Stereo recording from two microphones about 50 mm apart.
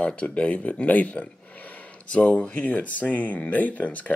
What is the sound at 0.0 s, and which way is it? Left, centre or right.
Speech, left.